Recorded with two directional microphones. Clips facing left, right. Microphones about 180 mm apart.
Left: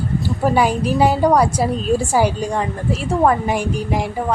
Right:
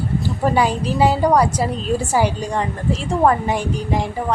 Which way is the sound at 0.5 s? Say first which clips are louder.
Left 2 dB; 15° left (ahead or behind).